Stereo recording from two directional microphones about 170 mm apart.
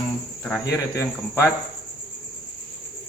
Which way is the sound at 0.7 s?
20° left (ahead or behind).